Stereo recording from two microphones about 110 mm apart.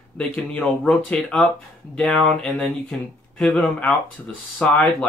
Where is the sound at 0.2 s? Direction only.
10° left (ahead or behind).